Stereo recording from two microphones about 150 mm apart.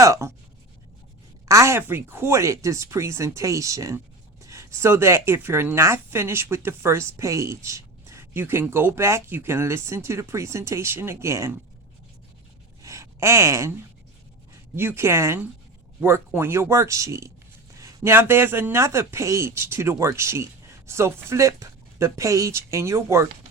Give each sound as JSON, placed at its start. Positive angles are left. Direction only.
{"t": 0.0, "sound": "speech", "side_deg": -20}
{"t": 1.5, "sound": "speech", "side_deg": -20}
{"t": 12.8, "sound": "a sound", "side_deg": -20}
{"t": 14.8, "sound": "speech", "side_deg": -15}